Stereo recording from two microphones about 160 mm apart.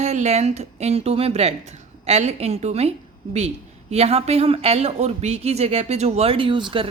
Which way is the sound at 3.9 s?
40° right (ahead or behind).